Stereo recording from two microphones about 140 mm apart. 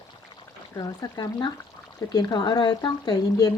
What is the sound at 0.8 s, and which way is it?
Speech, 25° left (ahead or behind).